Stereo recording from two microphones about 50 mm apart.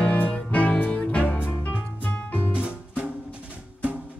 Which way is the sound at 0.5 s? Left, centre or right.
Left.